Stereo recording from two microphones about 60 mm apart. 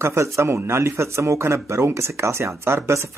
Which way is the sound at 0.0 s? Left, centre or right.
Right.